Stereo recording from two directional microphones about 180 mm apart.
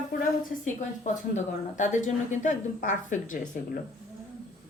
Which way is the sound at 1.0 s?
45° left (ahead or behind).